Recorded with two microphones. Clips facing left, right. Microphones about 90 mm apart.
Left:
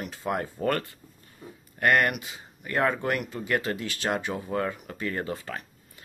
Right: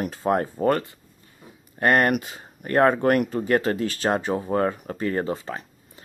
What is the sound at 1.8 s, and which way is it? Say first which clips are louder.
Speech: right 4 dB; 35° right (ahead or behind).